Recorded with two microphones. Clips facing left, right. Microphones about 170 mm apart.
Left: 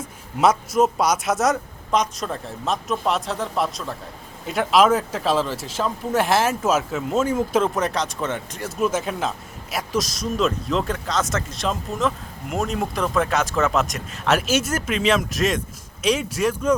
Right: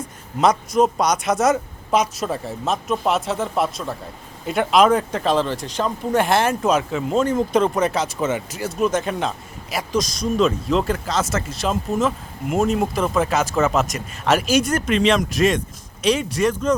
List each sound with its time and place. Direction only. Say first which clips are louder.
0.3 s speech: right 1 dB; 5° left (ahead or behind)